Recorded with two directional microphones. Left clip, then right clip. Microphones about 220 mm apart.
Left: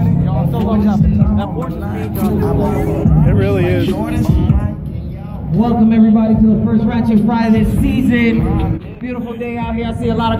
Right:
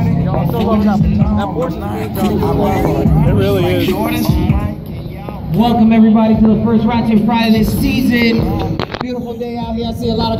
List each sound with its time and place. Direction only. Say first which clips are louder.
0.6 s music: right 3 dB; 25° left (ahead or behind)
1.3 s music: right 4 dB; 40° left (ahead or behind)
2.1 s vehicle: right 2 dB; 40° left (ahead or behind)
3.3 s music: right 2 dB; 5° right (ahead or behind)
3.6 s music: right 2 dB; 25° left (ahead or behind)
5.6 s a man's voice: right 2 dB; 30° left (ahead or behind)
7.1 s a woman's voice: right 1 dB; 25° left (ahead or behind)
7.5 s music: right 1 dB; 5° left (ahead or behind)
10.0 s music: left 1 dB; centre (ahead or behind)